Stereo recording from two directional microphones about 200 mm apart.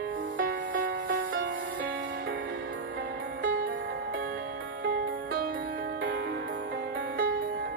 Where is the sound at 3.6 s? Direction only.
50° right (ahead or behind).